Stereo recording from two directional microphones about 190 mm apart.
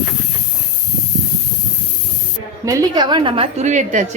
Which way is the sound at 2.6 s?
20° right (ahead or behind).